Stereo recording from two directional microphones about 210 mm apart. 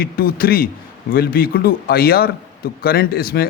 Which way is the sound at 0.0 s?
45° left (ahead or behind).